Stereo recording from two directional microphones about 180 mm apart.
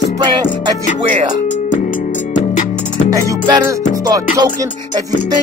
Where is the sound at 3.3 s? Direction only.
20° right (ahead or behind).